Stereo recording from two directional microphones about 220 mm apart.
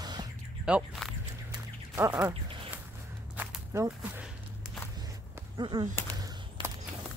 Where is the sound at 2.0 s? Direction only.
15° right (ahead or behind).